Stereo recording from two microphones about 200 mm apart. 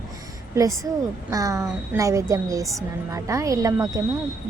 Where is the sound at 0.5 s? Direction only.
15° right (ahead or behind).